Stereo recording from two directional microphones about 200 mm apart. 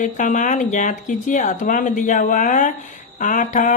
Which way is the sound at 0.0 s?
40° left (ahead or behind).